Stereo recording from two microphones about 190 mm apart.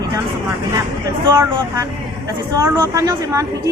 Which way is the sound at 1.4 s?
15° right (ahead or behind).